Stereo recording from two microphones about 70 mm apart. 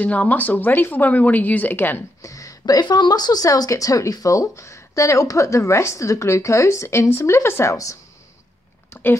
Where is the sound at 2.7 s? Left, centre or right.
Left.